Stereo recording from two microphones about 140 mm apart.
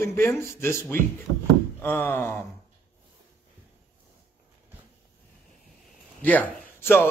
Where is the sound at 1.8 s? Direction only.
15° left (ahead or behind).